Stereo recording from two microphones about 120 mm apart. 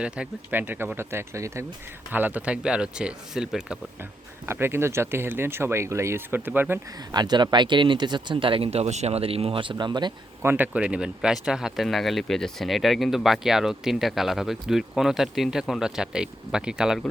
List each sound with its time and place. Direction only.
0.0 s speech: 10° right (ahead or behind)
2.1 s speech: 15° right (ahead or behind)
4.4 s speech: 20° right (ahead or behind)
7.1 s speech: 35° right (ahead or behind)
10.4 s speech: 15° right (ahead or behind)